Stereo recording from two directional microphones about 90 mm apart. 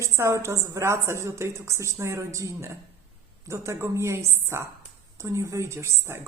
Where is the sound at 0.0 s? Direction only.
30° right (ahead or behind).